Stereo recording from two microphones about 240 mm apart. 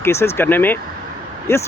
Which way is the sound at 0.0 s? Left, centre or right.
Centre.